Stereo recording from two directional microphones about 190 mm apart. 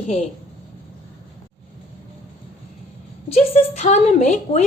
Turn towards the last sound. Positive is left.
turn(degrees=35)  # may be behind; listen again after turning